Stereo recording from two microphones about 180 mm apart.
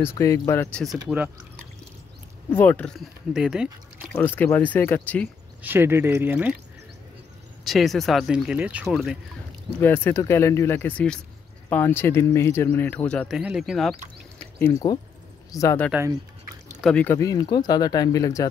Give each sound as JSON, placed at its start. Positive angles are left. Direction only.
{"t": 0.0, "sound": "speech", "side_deg": 15}
{"t": 1.0, "sound": "speech", "side_deg": -10}
{"t": 2.5, "sound": "speech", "side_deg": 10}
{"t": 3.3, "sound": "speech", "side_deg": -5}
{"t": 4.4, "sound": "speech", "side_deg": 10}
{"t": 5.6, "sound": "speech", "side_deg": -10}
{"t": 7.6, "sound": "speech", "side_deg": 0}
{"t": 9.8, "sound": "speech", "side_deg": 10}
{"t": 13.4, "sound": "speech", "side_deg": -5}
{"t": 14.6, "sound": "speech", "side_deg": 15}
{"t": 16.8, "sound": "speech", "side_deg": 5}